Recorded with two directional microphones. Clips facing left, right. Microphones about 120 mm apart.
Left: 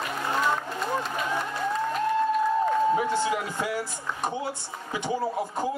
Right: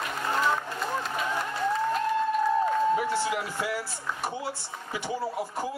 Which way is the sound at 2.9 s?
20° left (ahead or behind).